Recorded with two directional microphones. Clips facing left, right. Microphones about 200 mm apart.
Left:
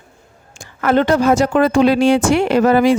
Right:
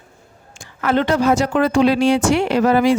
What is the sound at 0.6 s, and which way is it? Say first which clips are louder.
A woman's voice: left 3 dB; 45° left (ahead or behind).